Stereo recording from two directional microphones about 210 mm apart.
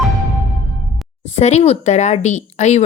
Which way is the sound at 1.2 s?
30° left (ahead or behind).